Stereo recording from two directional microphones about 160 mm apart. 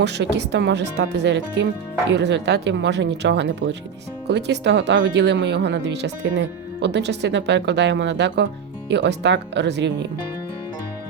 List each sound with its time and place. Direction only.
0.0 s speech: 90° right